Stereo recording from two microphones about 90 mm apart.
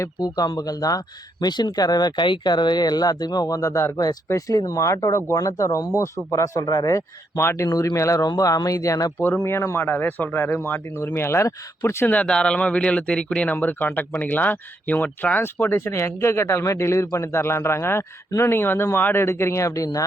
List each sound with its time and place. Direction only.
0.2 s speech: 50° left (ahead or behind)
9.2 s speech: 25° left (ahead or behind)
12.1 s speech: 10° left (ahead or behind); by 20.1 s 40° left (ahead or behind)